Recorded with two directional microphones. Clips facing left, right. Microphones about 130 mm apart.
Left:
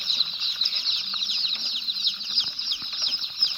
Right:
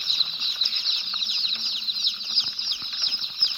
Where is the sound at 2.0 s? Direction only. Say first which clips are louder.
Even; 35° right (ahead or behind).